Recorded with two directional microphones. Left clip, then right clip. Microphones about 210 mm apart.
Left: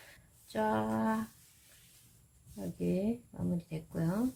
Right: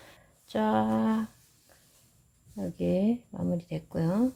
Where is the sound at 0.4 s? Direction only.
35° right (ahead or behind).